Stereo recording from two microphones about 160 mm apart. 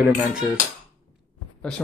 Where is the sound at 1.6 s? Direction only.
5° left (ahead or behind).